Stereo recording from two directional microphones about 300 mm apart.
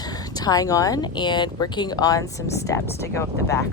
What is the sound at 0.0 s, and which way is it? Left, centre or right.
Speech, centre.